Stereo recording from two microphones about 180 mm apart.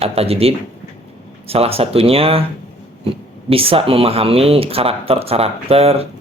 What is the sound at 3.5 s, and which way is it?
Speech, 30° right (ahead or behind).